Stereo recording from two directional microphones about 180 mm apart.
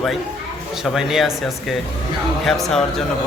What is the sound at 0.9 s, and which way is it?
Speech, centre (ahead or behind).